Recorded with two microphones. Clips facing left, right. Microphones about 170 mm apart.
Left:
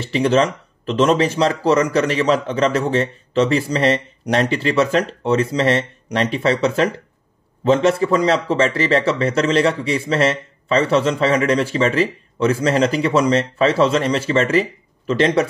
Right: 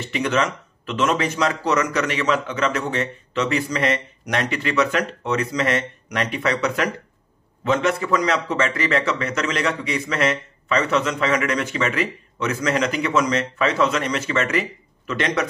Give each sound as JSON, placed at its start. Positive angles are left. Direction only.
{"t": 0.0, "sound": "a man's voice", "side_deg": 30}